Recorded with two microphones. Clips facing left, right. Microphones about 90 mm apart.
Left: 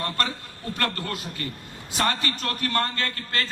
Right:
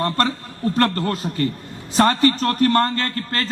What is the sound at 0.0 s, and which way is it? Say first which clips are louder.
A man's voice: right 8 dB; 35° right (ahead or behind).